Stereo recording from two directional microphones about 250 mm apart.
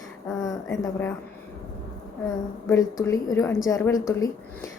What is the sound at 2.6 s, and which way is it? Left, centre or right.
A woman's voice, centre.